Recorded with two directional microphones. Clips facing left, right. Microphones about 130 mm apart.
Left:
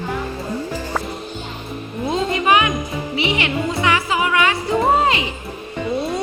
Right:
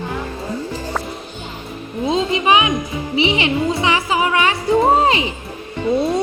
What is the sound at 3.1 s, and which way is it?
Music, 25° right (ahead or behind).